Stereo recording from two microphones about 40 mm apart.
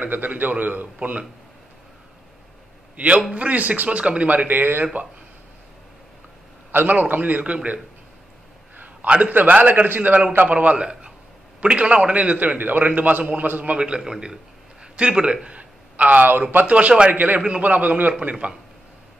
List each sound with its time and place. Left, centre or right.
0.0 s a man's voice: right
3.0 s a man's voice: right
4.0 s a man's voice: right
4.3 s a man's voice: right
6.7 s a man's voice: right
8.7 s a sound: right
9.2 s a man's voice: right
9.8 s a man's voice: right
10.4 s a man's voice: right
10.8 s a man's voice: right
13.7 s a man's voice: right
16.6 s a man's voice: right
17.1 s a man's voice: right
18.2 s a man's voice: right